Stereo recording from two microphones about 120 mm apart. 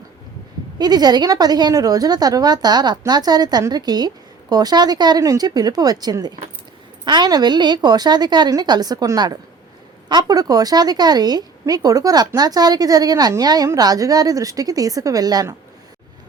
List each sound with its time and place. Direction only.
0.8 s speech: 35° right (ahead or behind)